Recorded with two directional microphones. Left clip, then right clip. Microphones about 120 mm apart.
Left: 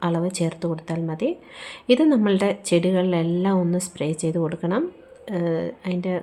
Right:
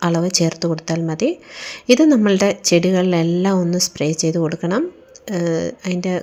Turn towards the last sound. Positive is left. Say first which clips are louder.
# right 4 dB
turn(degrees=-35)  # may be behind; listen again after turning